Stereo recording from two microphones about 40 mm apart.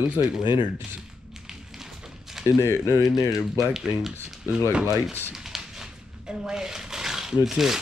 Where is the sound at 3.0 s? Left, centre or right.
Centre.